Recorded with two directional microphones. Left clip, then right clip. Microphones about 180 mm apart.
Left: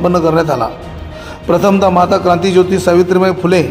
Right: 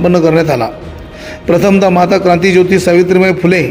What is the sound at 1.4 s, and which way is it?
Speech, 25° right (ahead or behind).